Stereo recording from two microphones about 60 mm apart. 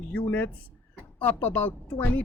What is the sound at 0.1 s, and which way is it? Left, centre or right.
Speech, left.